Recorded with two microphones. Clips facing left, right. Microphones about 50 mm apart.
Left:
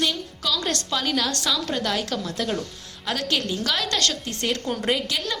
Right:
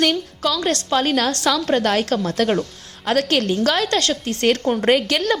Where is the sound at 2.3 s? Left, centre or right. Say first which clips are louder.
Right 8 dB; right.